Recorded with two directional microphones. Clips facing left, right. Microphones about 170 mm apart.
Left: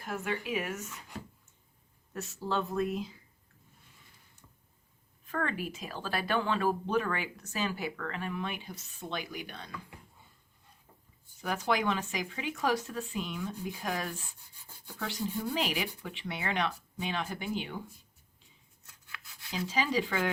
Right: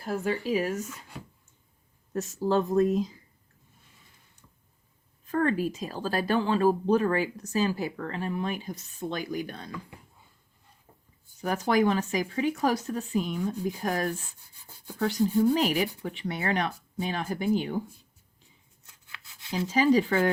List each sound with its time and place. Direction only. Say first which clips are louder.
0.0 s speech: right 6 dB; 35° right (ahead or behind)
2.1 s speech: right 8 dB; 40° right (ahead or behind)
5.2 s speech: right 8 dB; 40° right (ahead or behind)
11.3 s speech: right 6 dB; 45° right (ahead or behind)
18.9 s rub: even; 25° right (ahead or behind)
19.6 s speech: right 9 dB; 45° right (ahead or behind)